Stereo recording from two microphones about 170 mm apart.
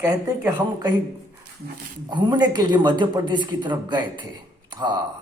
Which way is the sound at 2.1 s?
25° right (ahead or behind).